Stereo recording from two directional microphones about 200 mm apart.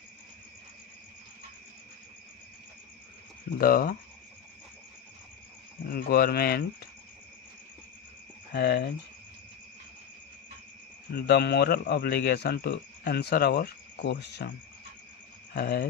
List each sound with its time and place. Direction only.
3.5 s speech: 45° left (ahead or behind)
5.9 s speech: 50° left (ahead or behind)
8.5 s cricket: 55° left (ahead or behind)
11.2 s speech: 55° left (ahead or behind)
15.5 s speech: 50° left (ahead or behind)